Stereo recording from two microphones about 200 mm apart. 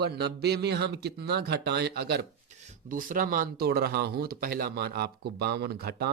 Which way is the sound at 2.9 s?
45° right (ahead or behind).